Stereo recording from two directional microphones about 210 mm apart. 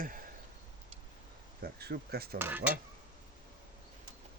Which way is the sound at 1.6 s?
50° right (ahead or behind).